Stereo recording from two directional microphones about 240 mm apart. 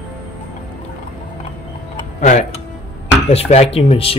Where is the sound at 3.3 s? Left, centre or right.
Left.